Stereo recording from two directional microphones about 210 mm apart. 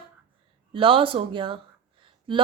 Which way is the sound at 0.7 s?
25° right (ahead or behind).